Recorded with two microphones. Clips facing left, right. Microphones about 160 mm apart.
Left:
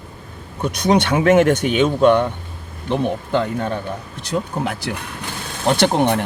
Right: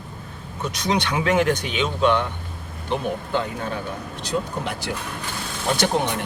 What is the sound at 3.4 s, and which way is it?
Speech, 60° left (ahead or behind).